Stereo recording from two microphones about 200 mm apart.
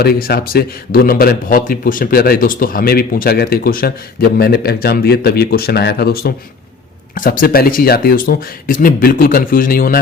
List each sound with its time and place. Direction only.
0.0 s a man's voice: 50° left (ahead or behind)